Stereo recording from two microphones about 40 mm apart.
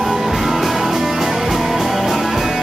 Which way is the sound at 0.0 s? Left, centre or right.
Centre.